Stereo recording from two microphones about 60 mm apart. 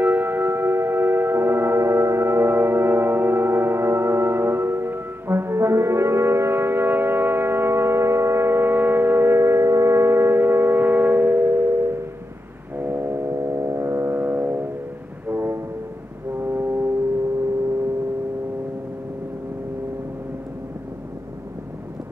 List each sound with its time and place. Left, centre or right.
0.0 s music: right
14.1 s music: right
15.2 s train: right
16.3 s foghorn: right